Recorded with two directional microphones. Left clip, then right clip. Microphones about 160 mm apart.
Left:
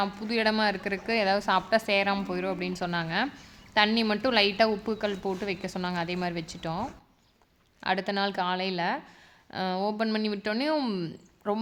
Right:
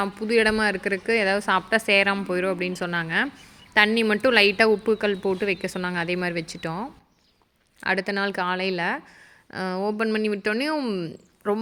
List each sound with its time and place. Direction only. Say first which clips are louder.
0.0 s a woman's voice: right 6 dB; 20° right (ahead or behind)